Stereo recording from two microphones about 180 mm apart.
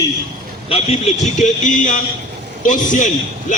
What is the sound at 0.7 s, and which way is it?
A man's voice, 35° left (ahead or behind).